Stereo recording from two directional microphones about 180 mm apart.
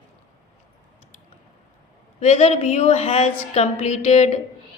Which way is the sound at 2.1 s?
40° left (ahead or behind).